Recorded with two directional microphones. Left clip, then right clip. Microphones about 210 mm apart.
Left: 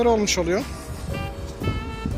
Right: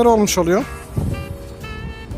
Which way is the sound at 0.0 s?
40° right (ahead or behind).